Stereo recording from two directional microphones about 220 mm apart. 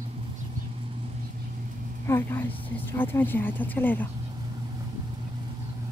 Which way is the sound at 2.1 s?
10° left (ahead or behind).